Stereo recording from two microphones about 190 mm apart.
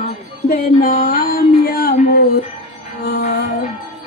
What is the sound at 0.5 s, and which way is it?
Speech, 50° left (ahead or behind).